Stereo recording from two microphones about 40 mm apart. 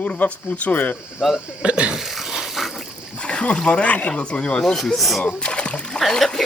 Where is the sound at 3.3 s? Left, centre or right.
Left.